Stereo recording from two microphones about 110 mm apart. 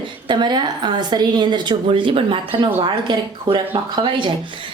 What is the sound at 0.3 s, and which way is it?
A woman's voice, 40° right (ahead or behind).